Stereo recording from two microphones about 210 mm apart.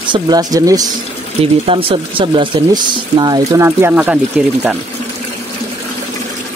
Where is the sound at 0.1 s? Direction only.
20° right (ahead or behind).